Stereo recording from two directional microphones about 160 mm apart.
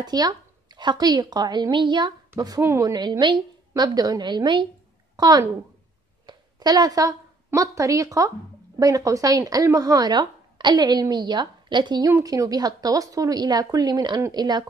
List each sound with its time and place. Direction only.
0.0 s a woman's voice: 25° right (ahead or behind)
6.2 s a sound: 25° right (ahead or behind)
8.7 s speech: 20° right (ahead or behind)